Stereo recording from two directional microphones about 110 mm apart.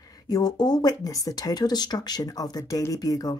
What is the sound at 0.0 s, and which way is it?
Speech, 35° left (ahead or behind).